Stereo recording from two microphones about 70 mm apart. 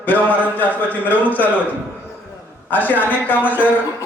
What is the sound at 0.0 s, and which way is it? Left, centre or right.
Speech, left.